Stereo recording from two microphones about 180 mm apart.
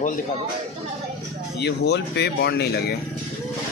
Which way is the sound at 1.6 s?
70° left (ahead or behind).